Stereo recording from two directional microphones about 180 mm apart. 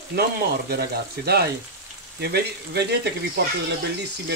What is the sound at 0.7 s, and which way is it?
Speech, 60° right (ahead or behind).